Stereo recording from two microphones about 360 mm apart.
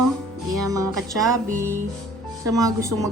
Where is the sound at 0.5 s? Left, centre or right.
Right.